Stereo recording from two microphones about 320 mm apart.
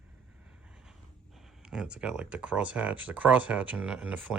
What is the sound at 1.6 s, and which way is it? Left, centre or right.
Speech, centre.